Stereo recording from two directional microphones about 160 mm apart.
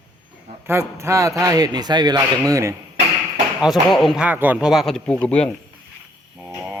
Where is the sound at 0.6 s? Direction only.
15° right (ahead or behind).